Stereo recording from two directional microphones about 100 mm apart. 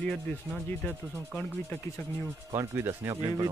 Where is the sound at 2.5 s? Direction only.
25° right (ahead or behind).